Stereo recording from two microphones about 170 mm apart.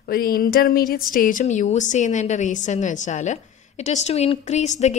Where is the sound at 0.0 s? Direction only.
60° left (ahead or behind).